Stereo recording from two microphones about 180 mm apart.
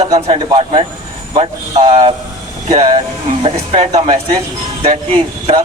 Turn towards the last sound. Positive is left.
turn(degrees=-30)  # may be behind; listen again after turning